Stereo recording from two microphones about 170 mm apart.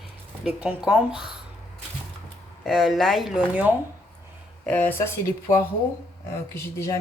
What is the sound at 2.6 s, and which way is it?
Speech, centre (ahead or behind).